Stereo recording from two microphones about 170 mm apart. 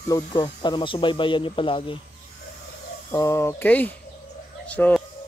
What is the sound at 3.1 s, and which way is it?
Speech, 15° left (ahead or behind).